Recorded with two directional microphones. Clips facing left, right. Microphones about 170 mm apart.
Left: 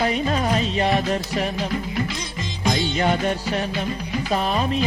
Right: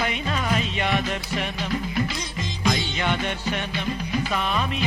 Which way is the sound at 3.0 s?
40° left (ahead or behind).